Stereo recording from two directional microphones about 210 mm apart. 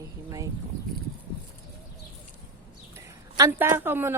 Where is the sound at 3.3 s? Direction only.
15° right (ahead or behind).